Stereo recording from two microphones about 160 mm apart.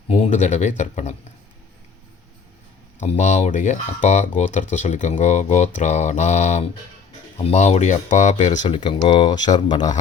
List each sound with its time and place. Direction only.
0.1 s speech: 45° left (ahead or behind)
3.0 s speech: 45° left (ahead or behind)
8.6 s speech: 30° left (ahead or behind)